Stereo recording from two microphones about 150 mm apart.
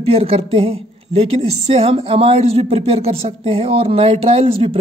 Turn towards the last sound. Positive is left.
turn(degrees=-40)  # may be behind; listen again after turning